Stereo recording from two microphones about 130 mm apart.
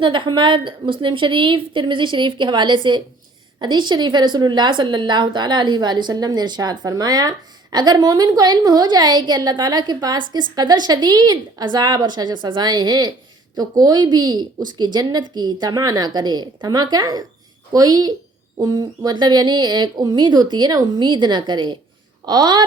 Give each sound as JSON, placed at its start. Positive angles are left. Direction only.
{"t": 0.0, "sound": "a woman's voice", "side_deg": -40}